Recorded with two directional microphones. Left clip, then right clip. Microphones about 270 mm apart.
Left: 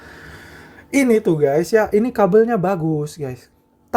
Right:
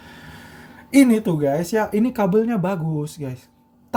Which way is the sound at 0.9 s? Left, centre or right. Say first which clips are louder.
Left 2 dB; centre.